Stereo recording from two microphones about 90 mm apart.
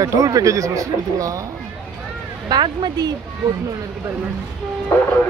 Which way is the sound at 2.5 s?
50° right (ahead or behind).